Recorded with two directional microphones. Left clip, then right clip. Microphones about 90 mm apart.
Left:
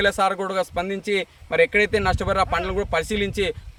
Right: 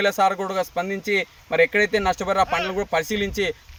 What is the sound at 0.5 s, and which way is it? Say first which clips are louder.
Speech: even; 25° left (ahead or behind).